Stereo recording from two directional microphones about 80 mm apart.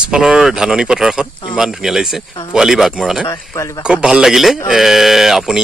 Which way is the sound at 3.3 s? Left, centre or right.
Left.